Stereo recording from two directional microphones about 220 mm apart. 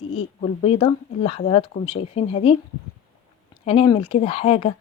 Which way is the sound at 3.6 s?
25° left (ahead or behind).